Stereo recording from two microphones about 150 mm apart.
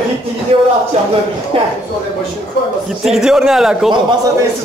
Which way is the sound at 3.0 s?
5° right (ahead or behind).